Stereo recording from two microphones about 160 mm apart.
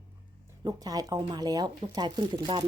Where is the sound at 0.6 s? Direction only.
25° right (ahead or behind).